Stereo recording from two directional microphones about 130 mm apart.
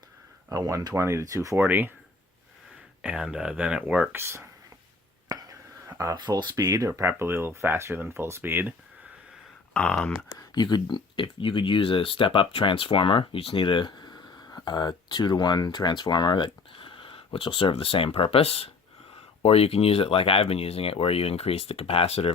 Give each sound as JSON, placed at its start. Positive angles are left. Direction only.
{"t": 0.5, "sound": "speech", "side_deg": -25}
{"t": 3.0, "sound": "speech", "side_deg": -5}
{"t": 5.3, "sound": "whispering", "side_deg": -30}
{"t": 6.1, "sound": "speech", "side_deg": -35}
{"t": 9.7, "sound": "speech", "side_deg": 10}
{"t": 10.3, "sound": "speech", "side_deg": 35}